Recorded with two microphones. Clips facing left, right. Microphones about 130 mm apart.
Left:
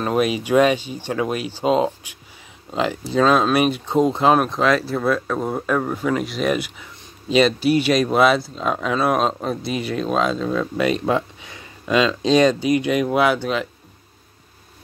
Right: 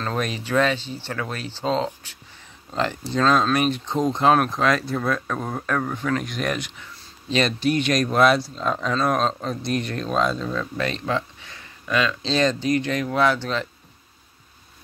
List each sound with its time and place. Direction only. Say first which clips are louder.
0.0 s speech: left 7 dB; 10° left (ahead or behind)